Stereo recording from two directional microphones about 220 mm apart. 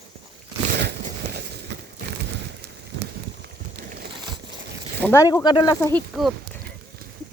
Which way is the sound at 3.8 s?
45° right (ahead or behind).